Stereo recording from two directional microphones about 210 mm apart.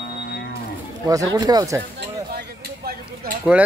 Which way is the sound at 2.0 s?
50° right (ahead or behind).